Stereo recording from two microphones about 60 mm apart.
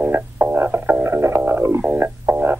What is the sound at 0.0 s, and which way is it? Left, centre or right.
Music, right.